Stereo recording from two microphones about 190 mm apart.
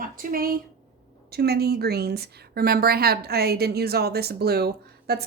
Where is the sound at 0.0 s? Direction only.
45° right (ahead or behind).